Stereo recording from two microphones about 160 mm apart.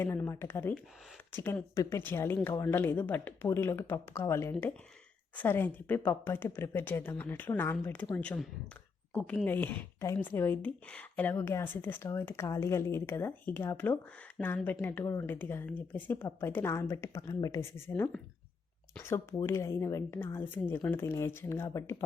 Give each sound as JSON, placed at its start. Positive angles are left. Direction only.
{"t": 0.0, "sound": "speech", "side_deg": 15}